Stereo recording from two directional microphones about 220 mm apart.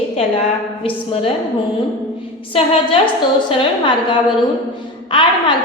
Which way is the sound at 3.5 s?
25° left (ahead or behind).